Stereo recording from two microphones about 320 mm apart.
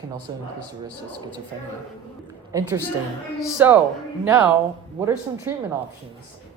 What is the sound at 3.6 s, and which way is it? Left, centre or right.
Speech, centre.